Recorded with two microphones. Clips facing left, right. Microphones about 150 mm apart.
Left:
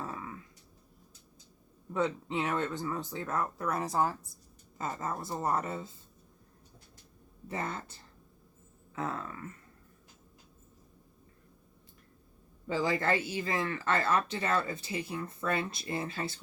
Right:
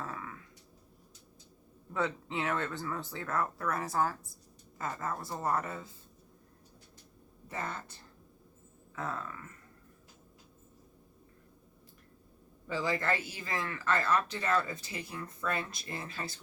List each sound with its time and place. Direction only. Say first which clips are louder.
0.0 s a sound: left 1 dB; 20° left (ahead or behind)
1.9 s speech: left 3 dB; 20° left (ahead or behind)
7.4 s speech: left 3 dB; 25° left (ahead or behind)
9.0 s speech: left 2 dB; 25° left (ahead or behind)
12.6 s speech: left 3 dB; 25° left (ahead or behind)